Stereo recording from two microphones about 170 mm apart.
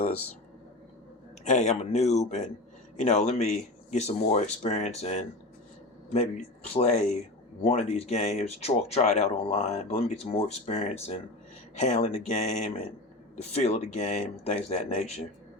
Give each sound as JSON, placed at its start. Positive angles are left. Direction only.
{"t": 1.5, "sound": "a man's voice", "side_deg": 45}